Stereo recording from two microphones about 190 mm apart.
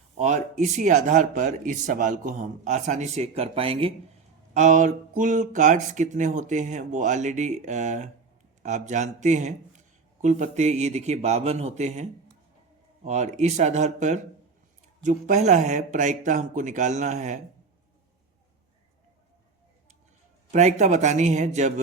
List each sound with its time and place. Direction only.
0.2 s speech: 40° right (ahead or behind)
4.5 s speech: 40° right (ahead or behind)
13.1 s speech: 35° right (ahead or behind)
20.5 s speech: 40° right (ahead or behind)